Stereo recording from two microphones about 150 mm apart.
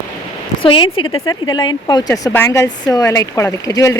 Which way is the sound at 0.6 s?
35° left (ahead or behind).